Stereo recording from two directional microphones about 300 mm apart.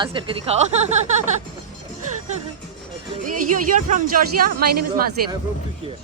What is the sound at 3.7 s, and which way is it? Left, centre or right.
A woman's voice, right.